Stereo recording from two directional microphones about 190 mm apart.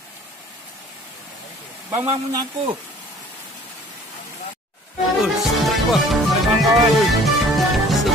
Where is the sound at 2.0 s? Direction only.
25° right (ahead or behind).